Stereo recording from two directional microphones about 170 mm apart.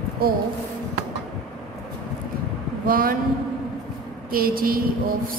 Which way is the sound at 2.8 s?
60° right (ahead or behind).